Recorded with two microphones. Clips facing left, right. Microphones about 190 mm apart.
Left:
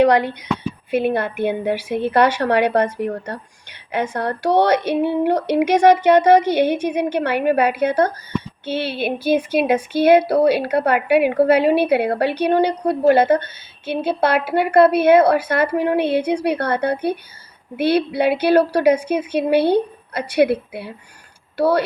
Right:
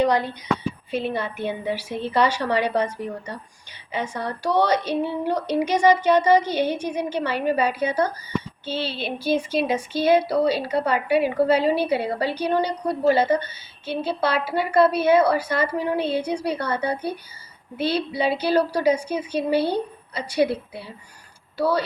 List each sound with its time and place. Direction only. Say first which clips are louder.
0.0 s speech: left 6 dB; 70° left (ahead or behind)